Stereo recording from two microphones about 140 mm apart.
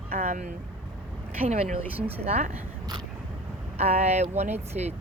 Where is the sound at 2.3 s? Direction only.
50° right (ahead or behind).